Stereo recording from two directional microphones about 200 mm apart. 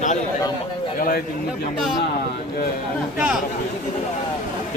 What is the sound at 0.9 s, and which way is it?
Speech, 45° left (ahead or behind).